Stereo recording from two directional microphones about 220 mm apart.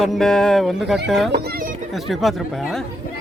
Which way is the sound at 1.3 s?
45° right (ahead or behind).